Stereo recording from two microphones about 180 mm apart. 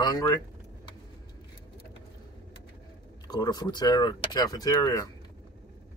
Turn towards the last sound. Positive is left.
turn(degrees=20)  # may be behind; listen again after turning